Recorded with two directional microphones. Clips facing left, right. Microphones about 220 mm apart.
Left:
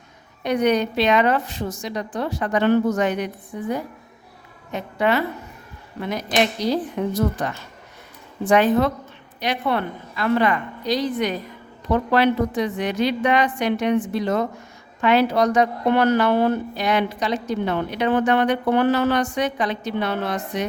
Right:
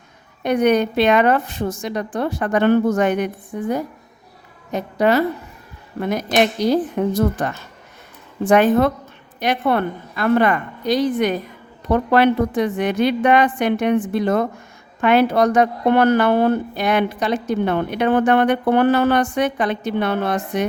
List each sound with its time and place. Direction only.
0.4 s a woman's voice: 55° right (ahead or behind)
4.7 s a woman's voice: 40° right (ahead or behind)